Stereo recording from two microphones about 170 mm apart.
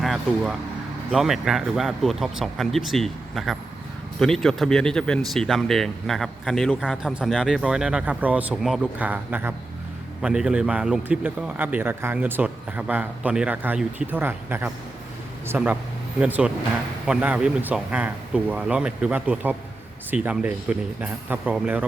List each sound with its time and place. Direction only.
0.0 s a man's voice: centre (ahead or behind)